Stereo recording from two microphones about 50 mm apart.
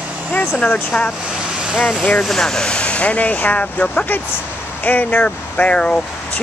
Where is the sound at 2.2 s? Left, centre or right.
Centre.